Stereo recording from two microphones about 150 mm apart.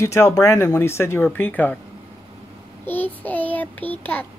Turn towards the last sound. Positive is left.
turn(degrees=10)  # may be behind; listen again after turning